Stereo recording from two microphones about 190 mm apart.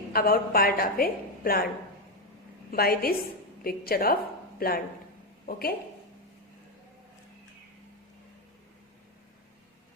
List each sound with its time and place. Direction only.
0.1 s a woman's voice: 50° left (ahead or behind)
2.7 s a woman's voice: 50° left (ahead or behind)